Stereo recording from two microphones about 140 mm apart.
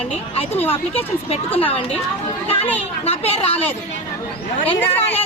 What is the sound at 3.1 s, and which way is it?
Speech, 45° left (ahead or behind).